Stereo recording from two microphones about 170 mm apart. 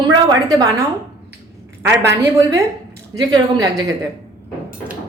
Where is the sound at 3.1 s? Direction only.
20° right (ahead or behind).